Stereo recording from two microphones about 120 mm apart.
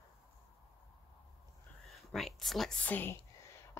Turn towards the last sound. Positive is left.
turn(degrees=20)  # may be behind; listen again after turning